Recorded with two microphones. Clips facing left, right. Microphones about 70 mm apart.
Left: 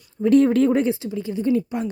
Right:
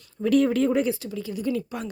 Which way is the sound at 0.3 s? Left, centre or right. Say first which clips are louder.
Left 5 dB; left.